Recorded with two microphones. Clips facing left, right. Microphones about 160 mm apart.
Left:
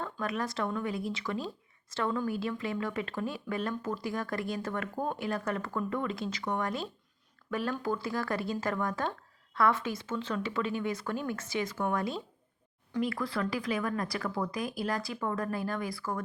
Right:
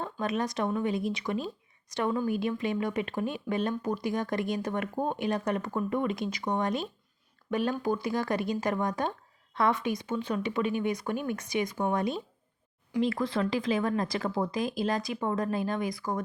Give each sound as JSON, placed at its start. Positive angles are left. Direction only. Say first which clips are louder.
{"t": 0.0, "sound": "speech", "louder": "right 3 dB", "side_deg": -20}